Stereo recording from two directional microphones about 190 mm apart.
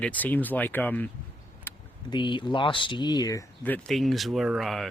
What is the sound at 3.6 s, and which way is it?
Speech, 5° left (ahead or behind).